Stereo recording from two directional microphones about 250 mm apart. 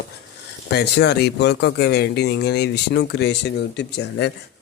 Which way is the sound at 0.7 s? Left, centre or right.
Left.